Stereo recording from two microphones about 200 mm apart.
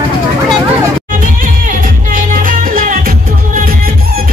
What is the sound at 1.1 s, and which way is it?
Music, 40° right (ahead or behind).